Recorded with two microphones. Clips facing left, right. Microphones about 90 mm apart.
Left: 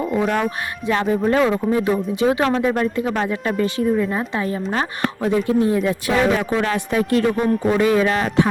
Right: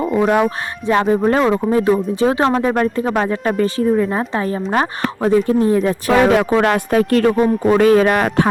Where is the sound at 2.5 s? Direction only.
40° right (ahead or behind).